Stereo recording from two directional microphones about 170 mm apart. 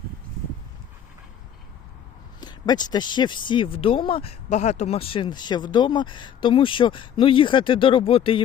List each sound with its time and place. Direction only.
2.4 s speech: 25° left (ahead or behind)